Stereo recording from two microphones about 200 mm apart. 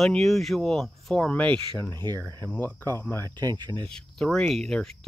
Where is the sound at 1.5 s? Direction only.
20° right (ahead or behind).